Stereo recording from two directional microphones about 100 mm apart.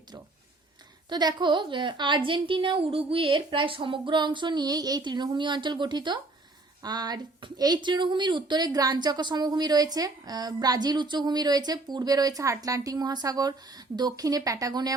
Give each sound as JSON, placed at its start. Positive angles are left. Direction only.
{"t": 1.1, "sound": "speech", "side_deg": -45}